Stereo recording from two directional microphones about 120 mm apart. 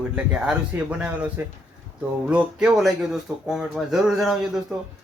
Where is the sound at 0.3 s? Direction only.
5° right (ahead or behind).